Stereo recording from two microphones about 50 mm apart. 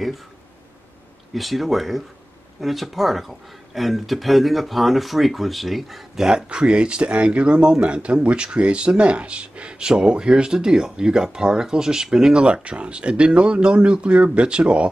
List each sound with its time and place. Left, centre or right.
1.3 s speech: centre
6.2 s speech: centre